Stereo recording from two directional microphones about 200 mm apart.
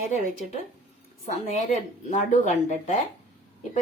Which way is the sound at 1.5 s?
35° left (ahead or behind).